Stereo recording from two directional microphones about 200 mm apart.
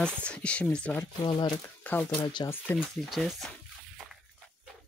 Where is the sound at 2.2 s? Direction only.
20° left (ahead or behind).